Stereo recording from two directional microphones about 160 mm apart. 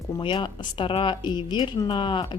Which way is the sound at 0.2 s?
30° left (ahead or behind).